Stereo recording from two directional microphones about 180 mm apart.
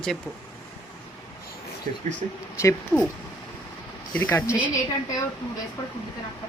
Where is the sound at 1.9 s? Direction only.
50° right (ahead or behind).